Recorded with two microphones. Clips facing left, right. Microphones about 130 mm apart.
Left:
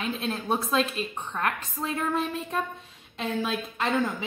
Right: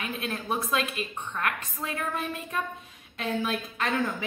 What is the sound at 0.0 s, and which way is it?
A woman's voice, 25° left (ahead or behind).